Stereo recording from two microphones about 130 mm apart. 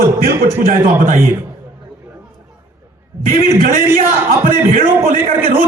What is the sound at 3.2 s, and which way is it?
A man's voice, 90° right.